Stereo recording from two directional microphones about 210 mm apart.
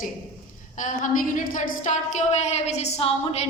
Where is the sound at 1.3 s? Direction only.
35° left (ahead or behind).